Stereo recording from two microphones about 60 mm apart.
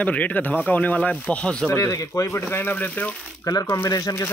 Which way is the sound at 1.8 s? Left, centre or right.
Left.